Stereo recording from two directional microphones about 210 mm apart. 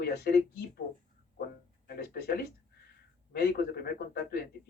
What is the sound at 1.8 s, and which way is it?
Speech, 45° left (ahead or behind).